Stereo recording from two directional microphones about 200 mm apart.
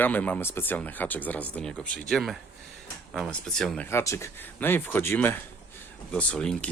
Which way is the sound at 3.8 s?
15° left (ahead or behind).